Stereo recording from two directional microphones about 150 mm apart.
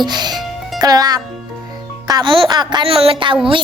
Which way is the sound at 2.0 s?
30° right (ahead or behind).